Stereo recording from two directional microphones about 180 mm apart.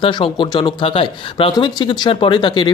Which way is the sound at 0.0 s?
30° left (ahead or behind).